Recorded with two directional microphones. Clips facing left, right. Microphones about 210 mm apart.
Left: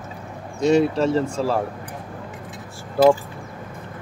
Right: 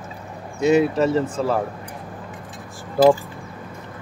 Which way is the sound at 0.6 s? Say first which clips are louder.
Right 1 dB; 5° right (ahead or behind).